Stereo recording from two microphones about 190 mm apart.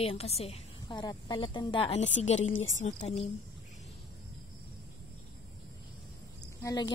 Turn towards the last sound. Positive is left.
turn(degrees=20)  # may be behind; listen again after turning